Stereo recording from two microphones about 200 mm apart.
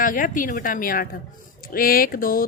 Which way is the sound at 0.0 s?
40° left (ahead or behind).